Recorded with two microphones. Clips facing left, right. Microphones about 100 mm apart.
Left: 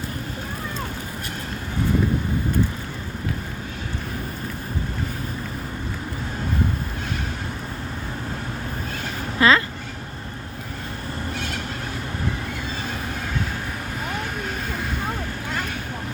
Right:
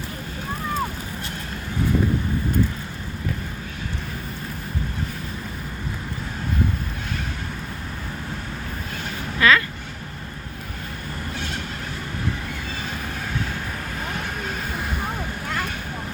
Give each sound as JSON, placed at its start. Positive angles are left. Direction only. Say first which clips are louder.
{"t": 9.4, "sound": "vehicle", "louder": "left 1 dB", "side_deg": 25}